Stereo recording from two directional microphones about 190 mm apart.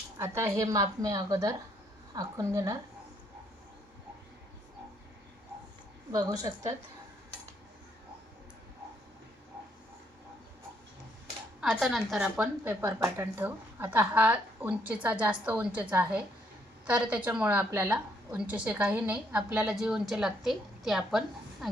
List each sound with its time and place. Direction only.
0.2 s a woman's voice: 15° right (ahead or behind)
6.1 s a woman's voice: 20° right (ahead or behind)
11.6 s a woman's voice: centre (ahead or behind)